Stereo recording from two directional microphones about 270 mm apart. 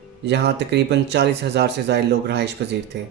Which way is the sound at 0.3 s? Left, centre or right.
Right.